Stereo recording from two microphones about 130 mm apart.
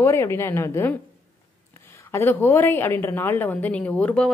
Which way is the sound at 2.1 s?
15° left (ahead or behind).